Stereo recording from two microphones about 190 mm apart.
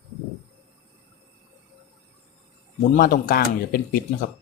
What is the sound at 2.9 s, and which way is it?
Speech, 50° left (ahead or behind).